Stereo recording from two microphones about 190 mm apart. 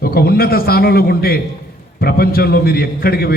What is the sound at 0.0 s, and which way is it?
A man's voice, 55° left (ahead or behind).